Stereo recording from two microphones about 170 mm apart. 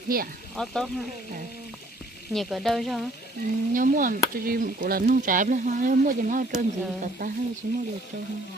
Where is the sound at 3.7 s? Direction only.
50° right (ahead or behind).